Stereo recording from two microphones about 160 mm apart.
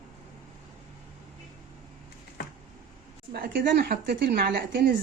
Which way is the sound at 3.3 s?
65° right (ahead or behind).